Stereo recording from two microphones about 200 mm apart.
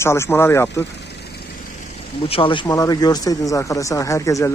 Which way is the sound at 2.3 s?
25° left (ahead or behind).